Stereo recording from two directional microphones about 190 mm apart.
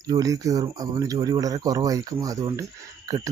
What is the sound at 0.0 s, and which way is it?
Speech, 20° right (ahead or behind).